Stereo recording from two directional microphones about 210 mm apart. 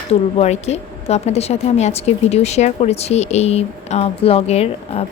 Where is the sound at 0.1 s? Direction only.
30° left (ahead or behind).